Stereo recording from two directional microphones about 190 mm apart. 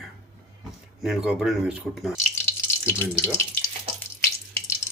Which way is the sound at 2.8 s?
10° left (ahead or behind).